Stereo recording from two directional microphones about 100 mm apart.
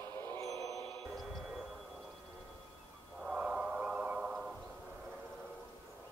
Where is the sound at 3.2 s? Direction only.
5° right (ahead or behind).